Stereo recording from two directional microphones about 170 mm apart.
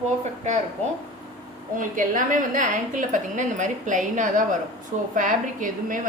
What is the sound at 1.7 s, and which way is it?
A woman's voice, 50° right (ahead or behind).